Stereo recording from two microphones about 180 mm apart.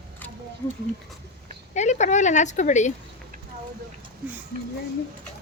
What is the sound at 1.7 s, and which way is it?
A woman's voice, 40° left (ahead or behind).